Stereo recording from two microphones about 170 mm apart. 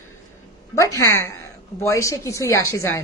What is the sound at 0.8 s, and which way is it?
A woman's voice, 20° left (ahead or behind).